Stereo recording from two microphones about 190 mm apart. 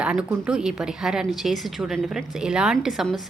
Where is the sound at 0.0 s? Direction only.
5° right (ahead or behind).